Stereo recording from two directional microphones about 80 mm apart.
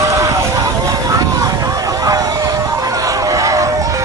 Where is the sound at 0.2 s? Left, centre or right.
Right.